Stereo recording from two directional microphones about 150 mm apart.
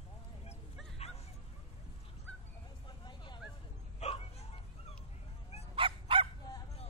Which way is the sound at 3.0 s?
30° left (ahead or behind).